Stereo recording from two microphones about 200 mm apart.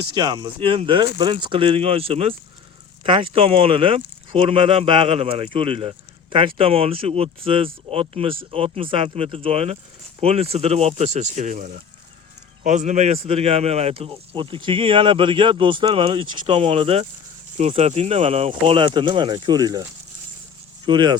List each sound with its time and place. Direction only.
0.0 s speech: 25° right (ahead or behind)
20.8 s speech: 20° right (ahead or behind)